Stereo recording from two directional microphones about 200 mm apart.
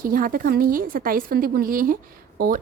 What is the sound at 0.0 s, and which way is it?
A woman's voice, 45° right (ahead or behind).